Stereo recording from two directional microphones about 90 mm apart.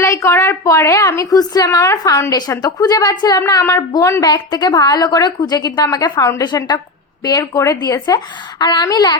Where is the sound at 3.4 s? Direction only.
40° left (ahead or behind).